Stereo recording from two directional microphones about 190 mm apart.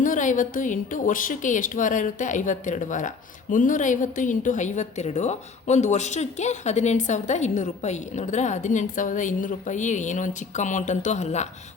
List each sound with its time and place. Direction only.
0.0 s a woman's voice: 45° left (ahead or behind)